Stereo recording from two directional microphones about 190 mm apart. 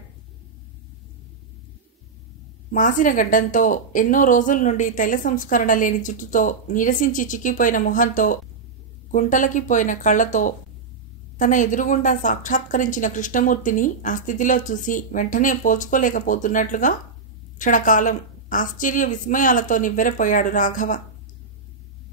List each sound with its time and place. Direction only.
2.7 s a woman's voice: 40° left (ahead or behind)